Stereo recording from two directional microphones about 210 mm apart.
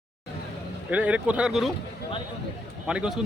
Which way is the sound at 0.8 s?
5° right (ahead or behind).